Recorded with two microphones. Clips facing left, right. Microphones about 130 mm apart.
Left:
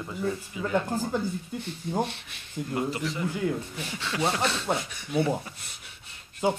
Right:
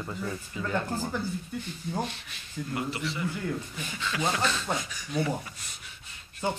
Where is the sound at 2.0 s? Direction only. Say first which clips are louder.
Left 3 dB; 65° left (ahead or behind).